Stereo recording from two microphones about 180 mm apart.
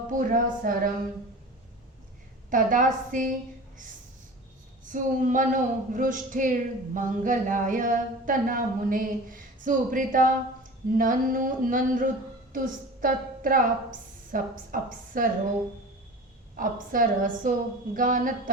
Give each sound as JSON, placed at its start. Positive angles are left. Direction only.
{"t": 0.1, "sound": "speech", "side_deg": -50}
{"t": 2.5, "sound": "speech", "side_deg": -50}
{"t": 4.9, "sound": "a woman's voice", "side_deg": -45}
{"t": 16.6, "sound": "speech", "side_deg": -50}